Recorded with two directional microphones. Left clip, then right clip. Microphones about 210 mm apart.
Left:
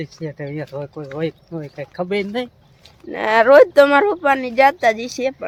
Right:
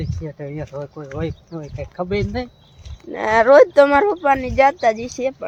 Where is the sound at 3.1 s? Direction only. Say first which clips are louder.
Left 1 dB; centre (ahead or behind).